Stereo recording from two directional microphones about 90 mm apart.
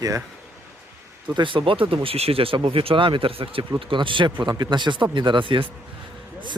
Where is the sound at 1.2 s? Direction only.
65° right (ahead or behind); by 3.6 s 85° right.